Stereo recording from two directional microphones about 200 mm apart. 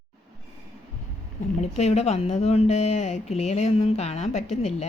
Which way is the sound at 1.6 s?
35° left (ahead or behind).